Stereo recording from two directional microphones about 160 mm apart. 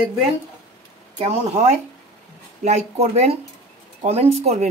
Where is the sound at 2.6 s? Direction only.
45° right (ahead or behind).